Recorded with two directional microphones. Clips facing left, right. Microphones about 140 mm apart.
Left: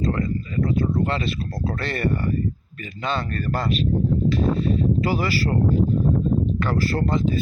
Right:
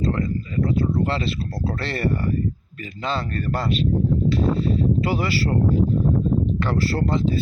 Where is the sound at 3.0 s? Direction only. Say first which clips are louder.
Even; 30° right (ahead or behind).